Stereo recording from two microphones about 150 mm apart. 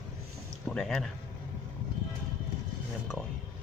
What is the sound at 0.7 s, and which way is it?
Speech, 5° left (ahead or behind).